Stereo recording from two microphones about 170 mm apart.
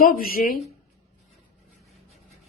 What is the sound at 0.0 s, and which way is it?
Speech, 55° left (ahead or behind).